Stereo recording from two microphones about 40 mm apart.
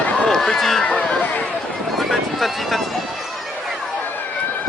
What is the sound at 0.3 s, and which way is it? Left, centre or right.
Run, centre.